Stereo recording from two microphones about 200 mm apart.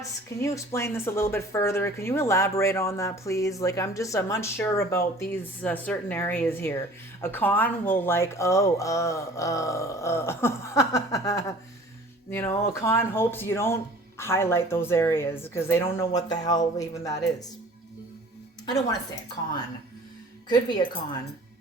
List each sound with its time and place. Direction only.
0.4 s speech: 15° left (ahead or behind)
18.6 s speech: 20° left (ahead or behind)
20.5 s speech: 20° left (ahead or behind)